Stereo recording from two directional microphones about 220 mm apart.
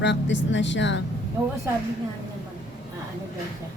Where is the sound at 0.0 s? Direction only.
55° left (ahead or behind).